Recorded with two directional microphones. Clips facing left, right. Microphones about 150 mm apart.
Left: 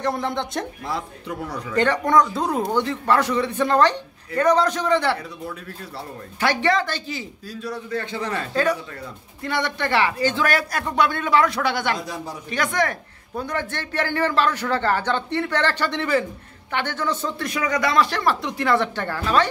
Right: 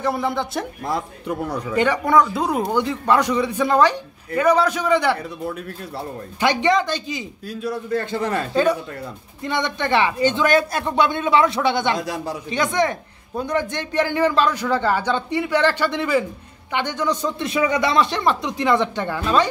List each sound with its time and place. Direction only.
0.0 s speech: 5° right (ahead or behind)
0.8 s a man's voice: 50° right (ahead or behind)
1.8 s a man's voice: 10° right (ahead or behind)
6.4 s a man's voice: 20° right (ahead or behind)
7.4 s a man's voice: 55° right (ahead or behind)
9.4 s speech: 20° right (ahead or behind)
12.0 s a man's voice: 90° right
12.4 s a man's voice: 20° right (ahead or behind)